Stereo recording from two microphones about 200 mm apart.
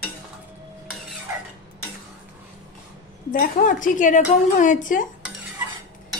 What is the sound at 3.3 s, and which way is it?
A woman's voice, 40° left (ahead or behind).